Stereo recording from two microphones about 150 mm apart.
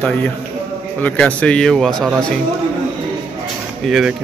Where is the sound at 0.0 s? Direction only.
10° left (ahead or behind).